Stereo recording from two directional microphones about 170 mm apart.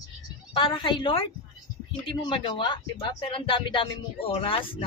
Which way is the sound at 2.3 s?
30° left (ahead or behind).